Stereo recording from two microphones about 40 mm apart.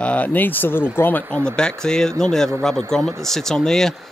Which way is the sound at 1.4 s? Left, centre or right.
Centre.